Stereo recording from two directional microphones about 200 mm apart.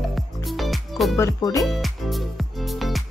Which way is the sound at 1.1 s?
15° left (ahead or behind).